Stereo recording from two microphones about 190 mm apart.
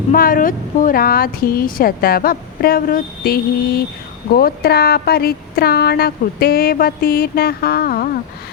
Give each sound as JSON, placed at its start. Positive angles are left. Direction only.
{"t": 0.1, "sound": "speech", "side_deg": 50}